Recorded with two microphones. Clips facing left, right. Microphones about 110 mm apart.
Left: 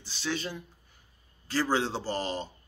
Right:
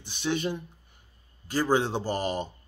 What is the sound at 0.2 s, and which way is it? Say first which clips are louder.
Speech: right 5 dB; 20° right (ahead or behind).